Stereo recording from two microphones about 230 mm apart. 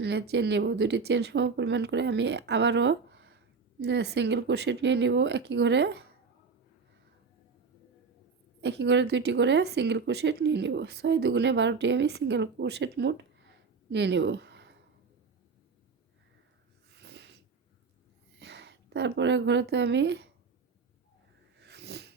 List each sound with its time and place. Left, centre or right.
0.0 s a woman's voice: right
8.6 s a woman's voice: right
16.9 s snort: right
18.3 s a woman's voice: right
21.6 s cat: right